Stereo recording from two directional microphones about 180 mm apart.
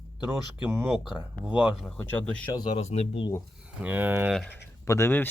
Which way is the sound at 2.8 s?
35° left (ahead or behind).